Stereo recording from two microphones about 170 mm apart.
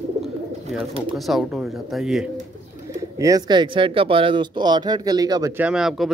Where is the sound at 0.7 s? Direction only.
5° right (ahead or behind).